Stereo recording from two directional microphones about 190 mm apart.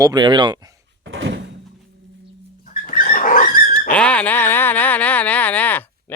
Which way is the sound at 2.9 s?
45° left (ahead or behind).